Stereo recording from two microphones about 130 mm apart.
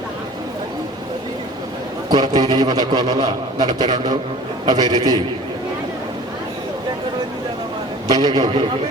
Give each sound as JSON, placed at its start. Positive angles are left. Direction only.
{"t": 2.0, "sound": "a man's voice", "side_deg": -30}
{"t": 8.0, "sound": "a man's voice", "side_deg": -30}